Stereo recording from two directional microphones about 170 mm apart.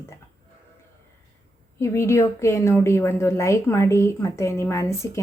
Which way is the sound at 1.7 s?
15° left (ahead or behind).